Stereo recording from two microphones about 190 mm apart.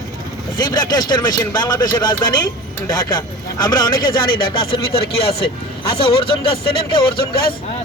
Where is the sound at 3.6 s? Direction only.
25° left (ahead or behind).